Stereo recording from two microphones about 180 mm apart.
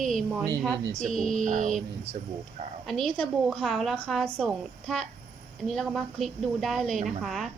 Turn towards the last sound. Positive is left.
turn(degrees=0)  # may be behind; listen again after turning